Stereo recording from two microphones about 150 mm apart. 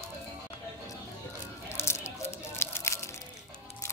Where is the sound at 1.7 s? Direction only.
15° left (ahead or behind).